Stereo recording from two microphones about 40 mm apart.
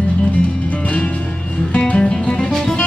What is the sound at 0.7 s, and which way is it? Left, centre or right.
Music, left.